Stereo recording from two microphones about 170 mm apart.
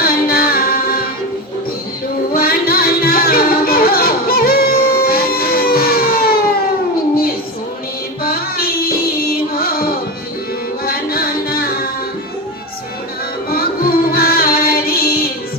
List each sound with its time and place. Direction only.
0.0 s music: 60° left (ahead or behind)
2.3 s music: 60° left (ahead or behind)
8.2 s female singing: 60° left (ahead or behind)
10.8 s music: 60° left (ahead or behind)
13.5 s music: 60° left (ahead or behind)